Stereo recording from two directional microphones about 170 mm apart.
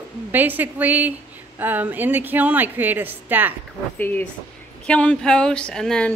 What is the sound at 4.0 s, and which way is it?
A woman's voice, 10° left (ahead or behind).